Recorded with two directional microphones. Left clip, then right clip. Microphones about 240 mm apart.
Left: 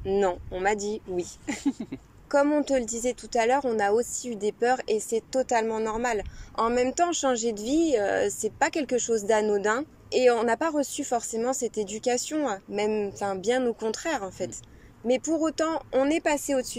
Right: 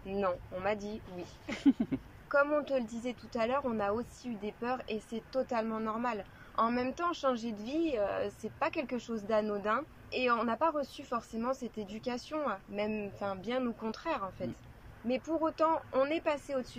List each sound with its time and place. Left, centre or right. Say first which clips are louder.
0.0 s speech: left 9 dB; left
1.6 s speech: right 3 dB; centre
2.3 s speech: left 6 dB; left